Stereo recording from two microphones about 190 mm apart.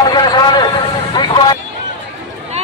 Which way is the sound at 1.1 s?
25° left (ahead or behind).